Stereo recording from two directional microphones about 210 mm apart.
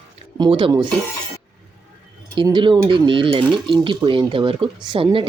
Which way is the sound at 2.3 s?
20° right (ahead or behind).